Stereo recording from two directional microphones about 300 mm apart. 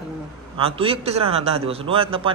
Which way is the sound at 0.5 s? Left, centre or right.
Centre.